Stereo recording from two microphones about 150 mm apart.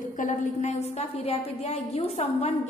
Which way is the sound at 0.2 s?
55° left (ahead or behind).